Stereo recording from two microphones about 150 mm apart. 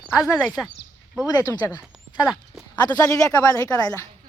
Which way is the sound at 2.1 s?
5° right (ahead or behind).